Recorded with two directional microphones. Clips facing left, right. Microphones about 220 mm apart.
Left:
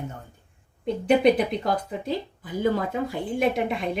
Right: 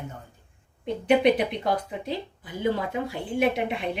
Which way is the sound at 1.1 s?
40° left (ahead or behind).